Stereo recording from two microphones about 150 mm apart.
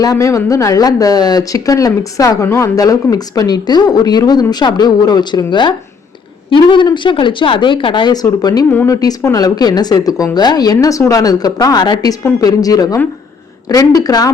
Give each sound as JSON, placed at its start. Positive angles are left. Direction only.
{"t": 0.0, "sound": "speech", "side_deg": 20}
{"t": 8.7, "sound": "a woman's voice", "side_deg": 15}
{"t": 9.0, "sound": "speech", "side_deg": 25}